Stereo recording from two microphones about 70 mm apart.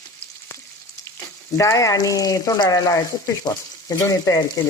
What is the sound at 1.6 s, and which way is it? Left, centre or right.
Speech, left.